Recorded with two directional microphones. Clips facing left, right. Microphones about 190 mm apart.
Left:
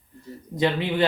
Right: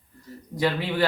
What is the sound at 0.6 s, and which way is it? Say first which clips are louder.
Speech: left 2 dB; 20° left (ahead or behind).